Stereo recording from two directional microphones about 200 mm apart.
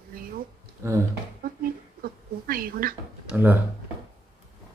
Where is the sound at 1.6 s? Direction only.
45° right (ahead or behind).